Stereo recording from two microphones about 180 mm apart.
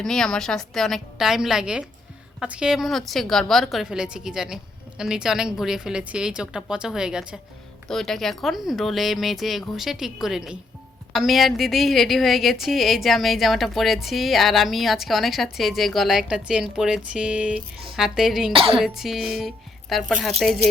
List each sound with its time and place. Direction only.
0.0 s a woman's voice: 5° left (ahead or behind)
18.5 s cough: 30° right (ahead or behind)
18.8 s a woman's voice: centre (ahead or behind)